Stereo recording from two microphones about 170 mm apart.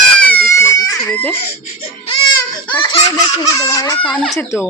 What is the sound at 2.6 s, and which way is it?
Baby laughter, 30° left (ahead or behind).